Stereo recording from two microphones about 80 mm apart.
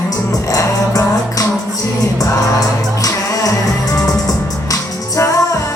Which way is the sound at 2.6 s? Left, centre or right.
Left.